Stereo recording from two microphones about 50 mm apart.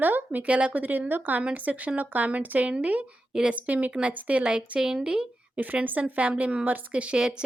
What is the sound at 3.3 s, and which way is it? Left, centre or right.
Speech, centre.